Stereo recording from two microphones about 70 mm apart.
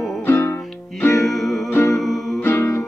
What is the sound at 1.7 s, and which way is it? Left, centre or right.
Music, left.